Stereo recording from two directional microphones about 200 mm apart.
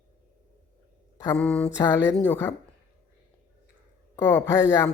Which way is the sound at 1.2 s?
10° left (ahead or behind).